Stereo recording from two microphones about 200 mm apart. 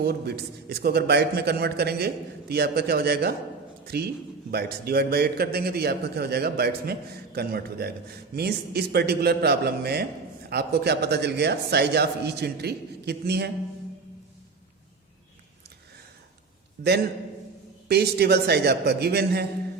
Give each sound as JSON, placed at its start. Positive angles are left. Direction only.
{"t": 0.0, "sound": "a man's voice", "side_deg": -50}
{"t": 16.8, "sound": "a man's voice", "side_deg": -50}